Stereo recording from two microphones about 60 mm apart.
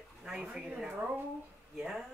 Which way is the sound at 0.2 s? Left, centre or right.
Centre.